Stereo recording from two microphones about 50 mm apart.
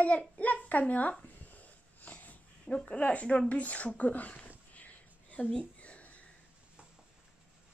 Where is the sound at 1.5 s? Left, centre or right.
Left.